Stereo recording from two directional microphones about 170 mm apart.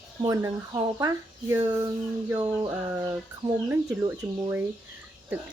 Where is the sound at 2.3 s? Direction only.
15° right (ahead or behind).